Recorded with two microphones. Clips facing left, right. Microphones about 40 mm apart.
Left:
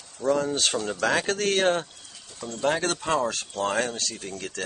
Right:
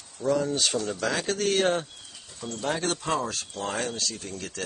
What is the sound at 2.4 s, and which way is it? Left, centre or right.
Speech, left.